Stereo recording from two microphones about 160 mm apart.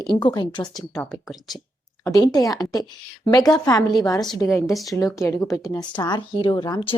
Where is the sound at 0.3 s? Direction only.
25° left (ahead or behind).